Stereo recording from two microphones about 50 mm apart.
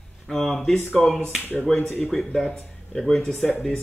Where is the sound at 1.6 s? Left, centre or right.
Centre.